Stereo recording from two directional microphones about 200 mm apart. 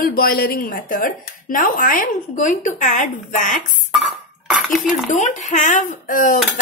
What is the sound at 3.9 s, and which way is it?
Dishes, centre (ahead or behind).